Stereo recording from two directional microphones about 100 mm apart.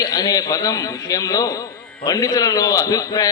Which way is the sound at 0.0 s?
40° left (ahead or behind).